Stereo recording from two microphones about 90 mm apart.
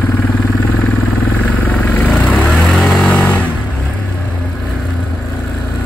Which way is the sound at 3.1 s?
20° left (ahead or behind).